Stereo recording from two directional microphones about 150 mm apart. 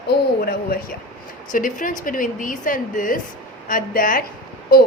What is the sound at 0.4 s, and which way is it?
Speech, 80° left.